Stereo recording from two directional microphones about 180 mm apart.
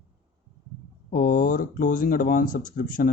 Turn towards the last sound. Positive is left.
turn(degrees=50)  # may be behind; listen again after turning